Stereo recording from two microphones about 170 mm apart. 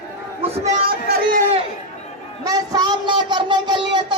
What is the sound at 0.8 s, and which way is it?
Speech, 65° right (ahead or behind).